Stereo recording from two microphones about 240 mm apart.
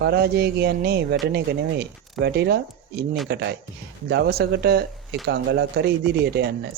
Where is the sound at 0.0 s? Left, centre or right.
Right.